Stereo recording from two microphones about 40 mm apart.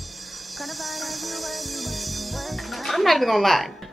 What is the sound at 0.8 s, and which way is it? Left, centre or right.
Music, centre.